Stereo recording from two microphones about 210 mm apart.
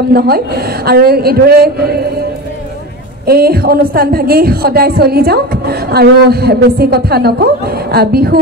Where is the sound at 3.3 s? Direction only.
45° right (ahead or behind).